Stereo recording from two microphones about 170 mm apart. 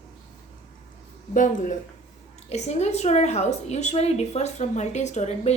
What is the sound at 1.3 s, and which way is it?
A woman's voice, 50° left (ahead or behind).